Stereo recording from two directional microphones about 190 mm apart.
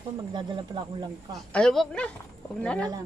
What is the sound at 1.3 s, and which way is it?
Speech, 5° left (ahead or behind).